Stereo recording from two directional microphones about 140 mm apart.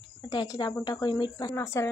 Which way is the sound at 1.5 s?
20° left (ahead or behind).